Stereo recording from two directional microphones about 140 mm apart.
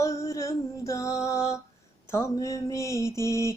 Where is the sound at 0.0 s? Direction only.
20° left (ahead or behind).